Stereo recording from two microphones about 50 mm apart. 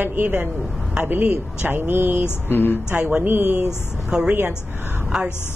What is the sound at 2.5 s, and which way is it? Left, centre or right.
Speech, left.